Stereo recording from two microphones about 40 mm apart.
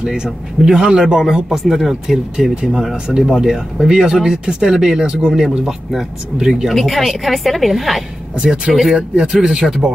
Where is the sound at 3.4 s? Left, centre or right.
Centre.